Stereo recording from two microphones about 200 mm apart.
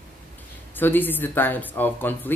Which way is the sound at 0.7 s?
10° left (ahead or behind).